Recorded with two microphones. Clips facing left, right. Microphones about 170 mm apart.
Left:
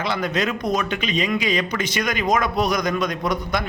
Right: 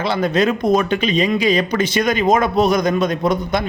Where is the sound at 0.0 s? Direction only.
30° right (ahead or behind).